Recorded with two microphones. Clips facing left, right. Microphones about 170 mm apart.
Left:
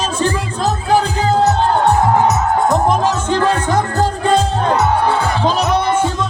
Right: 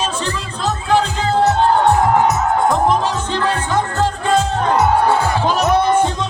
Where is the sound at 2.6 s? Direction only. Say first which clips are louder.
Left 2 dB; 45° left (ahead or behind).